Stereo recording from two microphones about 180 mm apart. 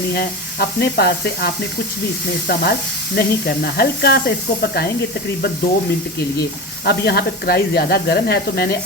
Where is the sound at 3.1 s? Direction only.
60° left (ahead or behind).